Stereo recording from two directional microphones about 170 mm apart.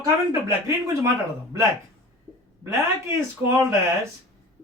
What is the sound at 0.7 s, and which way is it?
Speech, 15° right (ahead or behind).